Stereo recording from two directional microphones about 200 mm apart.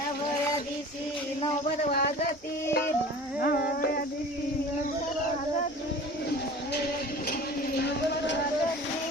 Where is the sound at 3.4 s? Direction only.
50° left (ahead or behind).